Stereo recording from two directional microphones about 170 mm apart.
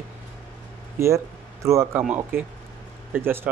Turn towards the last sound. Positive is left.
turn(degrees=-10)  # may be behind; listen again after turning